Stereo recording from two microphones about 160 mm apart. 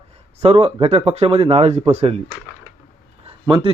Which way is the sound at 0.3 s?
40° right (ahead or behind).